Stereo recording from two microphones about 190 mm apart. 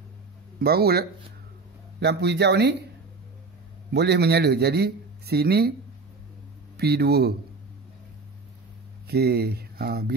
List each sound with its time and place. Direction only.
0.6 s a man's voice: 55° right (ahead or behind)
3.9 s a man's voice: 60° right (ahead or behind)
6.8 s a man's voice: 60° right (ahead or behind)
9.0 s speech: 55° right (ahead or behind)